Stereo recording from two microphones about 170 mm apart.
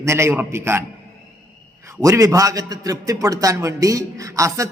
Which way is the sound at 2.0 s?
20° right (ahead or behind).